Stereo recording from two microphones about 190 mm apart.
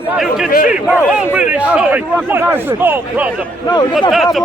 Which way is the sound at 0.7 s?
5° right (ahead or behind).